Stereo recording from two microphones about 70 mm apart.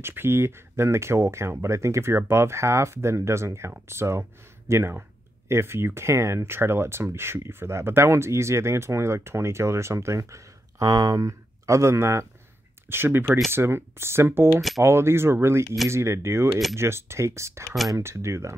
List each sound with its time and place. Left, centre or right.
0.0 s speech: right